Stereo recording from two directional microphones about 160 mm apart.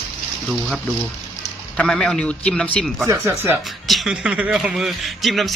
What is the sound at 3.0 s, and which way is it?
Speech, 15° right (ahead or behind).